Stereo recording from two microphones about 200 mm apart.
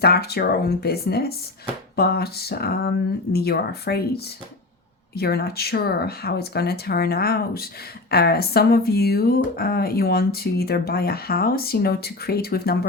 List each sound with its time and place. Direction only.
0.0 s speech: 50° left (ahead or behind)